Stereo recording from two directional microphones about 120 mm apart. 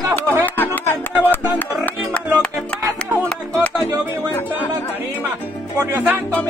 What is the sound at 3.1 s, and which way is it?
Music, 20° right (ahead or behind).